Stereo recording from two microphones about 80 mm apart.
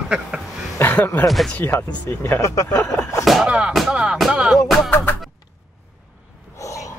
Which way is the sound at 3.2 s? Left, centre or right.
Centre.